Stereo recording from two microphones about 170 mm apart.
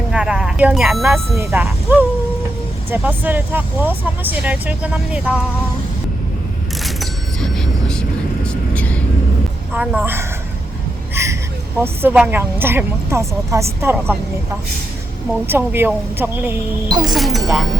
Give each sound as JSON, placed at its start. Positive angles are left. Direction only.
{"t": 0.1, "sound": "speech", "side_deg": -5}
{"t": 6.8, "sound": "music", "side_deg": 0}
{"t": 8.4, "sound": "vehicle", "side_deg": 10}
{"t": 9.7, "sound": "speech", "side_deg": -10}
{"t": 11.1, "sound": "a sound", "side_deg": -15}
{"t": 11.8, "sound": "speech", "side_deg": -10}
{"t": 15.4, "sound": "speech", "side_deg": -15}
{"t": 17.0, "sound": "speech", "side_deg": 0}